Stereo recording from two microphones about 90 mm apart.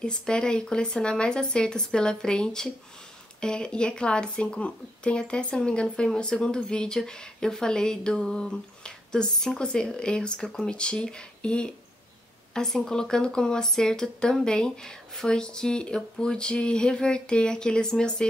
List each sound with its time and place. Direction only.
0.0 s speech: 10° left (ahead or behind)